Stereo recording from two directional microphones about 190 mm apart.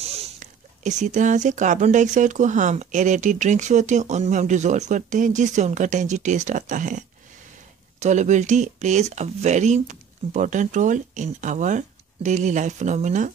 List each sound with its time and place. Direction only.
0.0 s speech: 35° right (ahead or behind)